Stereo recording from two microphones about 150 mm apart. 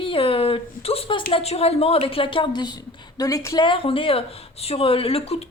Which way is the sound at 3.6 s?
35° left (ahead or behind).